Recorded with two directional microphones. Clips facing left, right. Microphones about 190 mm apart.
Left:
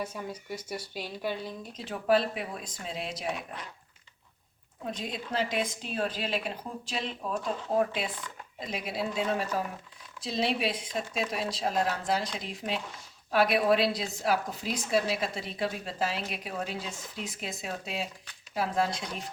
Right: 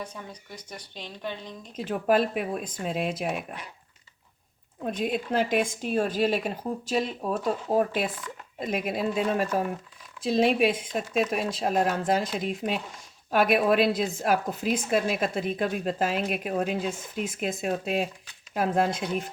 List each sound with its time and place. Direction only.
0.0 s speech: 10° left (ahead or behind)
1.7 s a woman's voice: 50° right (ahead or behind)
3.2 s speech: 10° right (ahead or behind)
4.9 s a woman's voice: 55° right (ahead or behind)
10.2 s a woman's voice: 50° right (ahead or behind)